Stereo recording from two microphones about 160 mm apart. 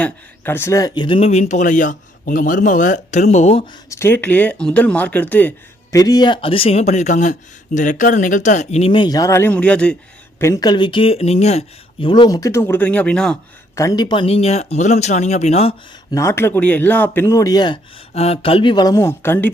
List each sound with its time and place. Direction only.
0.0 s speech: 15° left (ahead or behind); by 3.7 s 45° left (ahead or behind)
3.8 s speech: 15° left (ahead or behind)
5.9 s speech: 20° left (ahead or behind); by 10.4 s 5° left (ahead or behind)
10.4 s speech: 20° left (ahead or behind); by 13.4 s 5° left (ahead or behind)
13.7 s speech: 25° left (ahead or behind); by 15.7 s 40° left (ahead or behind)
16.1 s speech: 15° left (ahead or behind)
18.1 s speech: 40° left (ahead or behind); by 19.5 s 15° left (ahead or behind)